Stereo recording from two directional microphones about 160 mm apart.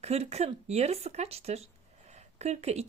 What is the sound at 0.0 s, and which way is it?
A woman's voice, 40° right (ahead or behind).